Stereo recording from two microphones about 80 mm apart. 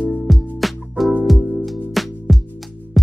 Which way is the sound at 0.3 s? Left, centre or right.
Centre.